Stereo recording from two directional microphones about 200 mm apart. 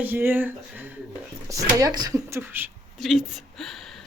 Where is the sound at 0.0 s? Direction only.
10° right (ahead or behind).